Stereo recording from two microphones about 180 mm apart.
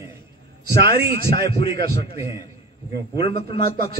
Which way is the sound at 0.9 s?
60° right (ahead or behind).